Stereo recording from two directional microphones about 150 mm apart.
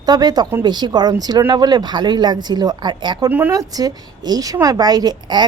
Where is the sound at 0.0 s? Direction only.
25° right (ahead or behind).